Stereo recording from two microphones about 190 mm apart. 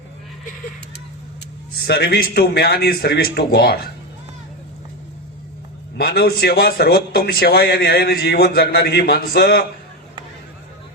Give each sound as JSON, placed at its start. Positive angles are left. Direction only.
{"t": 1.8, "sound": "a man's voice", "side_deg": 60}
{"t": 6.0, "sound": "a man's voice", "side_deg": 55}